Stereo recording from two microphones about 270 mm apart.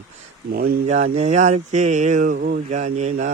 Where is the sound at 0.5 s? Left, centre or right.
Right.